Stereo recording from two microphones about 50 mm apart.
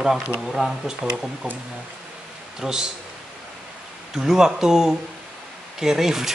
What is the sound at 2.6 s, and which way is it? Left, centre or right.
Speech, centre.